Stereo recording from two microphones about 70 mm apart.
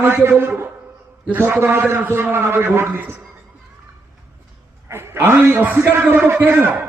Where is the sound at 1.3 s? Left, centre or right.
Right.